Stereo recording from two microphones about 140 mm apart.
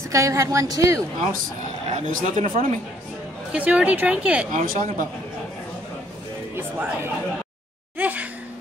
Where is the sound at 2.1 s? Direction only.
60° right (ahead or behind).